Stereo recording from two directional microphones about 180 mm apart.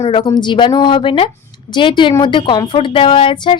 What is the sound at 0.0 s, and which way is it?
A woman's voice, 30° left (ahead or behind).